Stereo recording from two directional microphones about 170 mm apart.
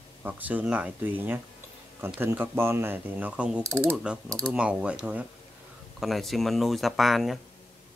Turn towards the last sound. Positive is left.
turn(degrees=0)  # may be behind; listen again after turning